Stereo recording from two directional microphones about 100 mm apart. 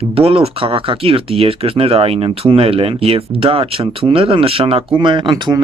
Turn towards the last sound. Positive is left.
turn(degrees=-45)  # may be behind; listen again after turning